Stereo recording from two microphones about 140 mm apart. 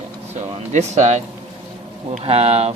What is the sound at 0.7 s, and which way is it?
Speech, 55° right (ahead or behind).